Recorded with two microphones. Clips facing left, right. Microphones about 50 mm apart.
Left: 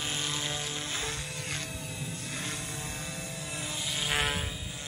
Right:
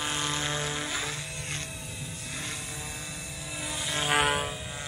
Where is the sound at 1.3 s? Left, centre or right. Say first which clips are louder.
Even; centre.